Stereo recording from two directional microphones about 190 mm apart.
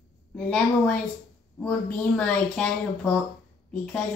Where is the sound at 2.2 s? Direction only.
5° left (ahead or behind).